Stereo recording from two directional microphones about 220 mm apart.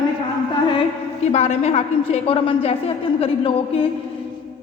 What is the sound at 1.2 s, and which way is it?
A woman's voice, 30° left (ahead or behind).